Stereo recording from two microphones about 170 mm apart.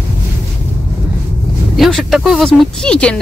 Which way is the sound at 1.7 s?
Centre (ahead or behind).